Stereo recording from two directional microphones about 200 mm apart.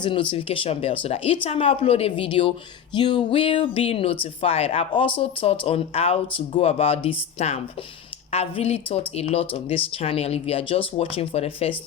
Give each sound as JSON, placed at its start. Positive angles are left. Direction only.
{"t": 0.0, "sound": "speech", "side_deg": 25}